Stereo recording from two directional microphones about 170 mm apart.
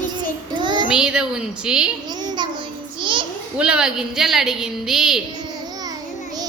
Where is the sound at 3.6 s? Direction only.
5° right (ahead or behind).